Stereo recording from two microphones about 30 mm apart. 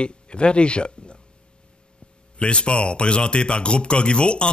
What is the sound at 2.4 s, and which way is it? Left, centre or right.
Speech, left.